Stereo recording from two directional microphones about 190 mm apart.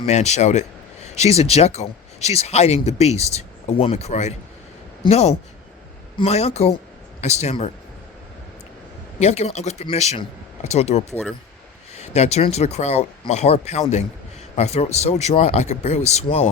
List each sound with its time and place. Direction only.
0.1 s speech: 35° left (ahead or behind)
9.1 s speech: 35° left (ahead or behind)